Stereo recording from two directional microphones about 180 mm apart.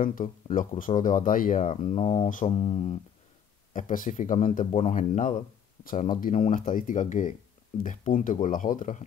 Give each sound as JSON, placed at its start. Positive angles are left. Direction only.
{"t": 0.0, "sound": "speech", "side_deg": 45}
{"t": 3.7, "sound": "speech", "side_deg": 45}